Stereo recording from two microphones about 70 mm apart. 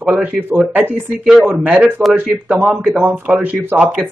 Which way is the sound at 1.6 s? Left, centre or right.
Right.